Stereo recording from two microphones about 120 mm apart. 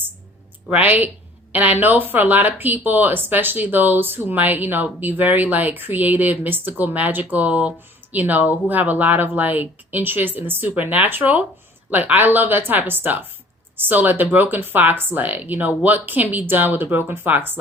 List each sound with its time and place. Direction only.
0.7 s speech: 15° right (ahead or behind)